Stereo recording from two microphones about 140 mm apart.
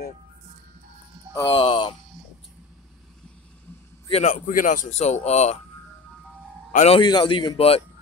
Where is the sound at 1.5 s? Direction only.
40° left (ahead or behind).